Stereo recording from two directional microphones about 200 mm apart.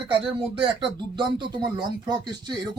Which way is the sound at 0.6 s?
25° right (ahead or behind).